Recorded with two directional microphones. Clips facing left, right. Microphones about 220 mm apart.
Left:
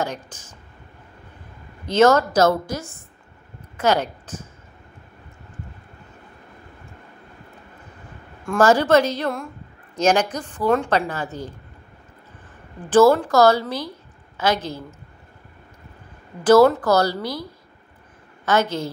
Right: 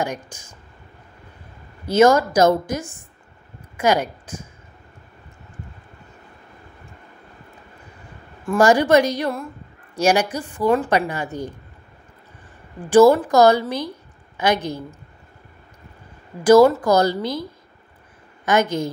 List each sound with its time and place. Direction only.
0.0 s a woman's voice: 15° right (ahead or behind)
1.9 s a woman's voice: 10° right (ahead or behind)
8.5 s a woman's voice: 15° right (ahead or behind)
12.9 s a woman's voice: 15° right (ahead or behind)
16.4 s a woman's voice: 10° right (ahead or behind)